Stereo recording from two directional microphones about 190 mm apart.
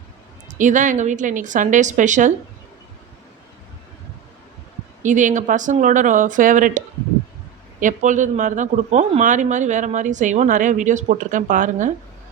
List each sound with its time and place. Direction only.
0.6 s speech: 40° right (ahead or behind)
5.0 s speech: 40° right (ahead or behind)